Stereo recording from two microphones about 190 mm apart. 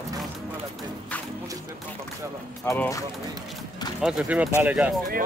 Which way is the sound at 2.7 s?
10° left (ahead or behind).